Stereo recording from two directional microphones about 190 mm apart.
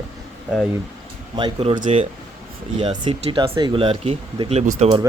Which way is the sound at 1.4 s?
30° right (ahead or behind).